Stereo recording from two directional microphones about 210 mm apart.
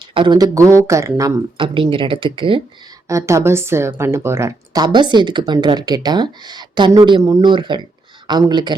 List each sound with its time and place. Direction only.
0.1 s speech: 20° right (ahead or behind)